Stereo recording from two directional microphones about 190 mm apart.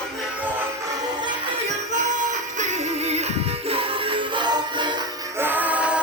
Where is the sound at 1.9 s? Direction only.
40° right (ahead or behind); by 4.9 s 25° right (ahead or behind).